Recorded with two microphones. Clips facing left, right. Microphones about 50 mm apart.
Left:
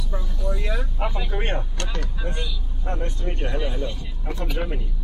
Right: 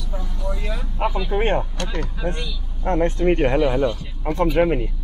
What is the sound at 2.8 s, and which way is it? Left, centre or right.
Speech, right.